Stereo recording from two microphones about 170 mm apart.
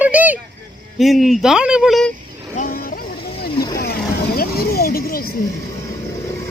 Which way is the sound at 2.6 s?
55° left (ahead or behind).